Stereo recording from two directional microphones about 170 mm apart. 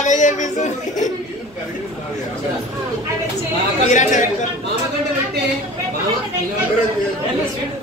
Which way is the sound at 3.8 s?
45° left (ahead or behind).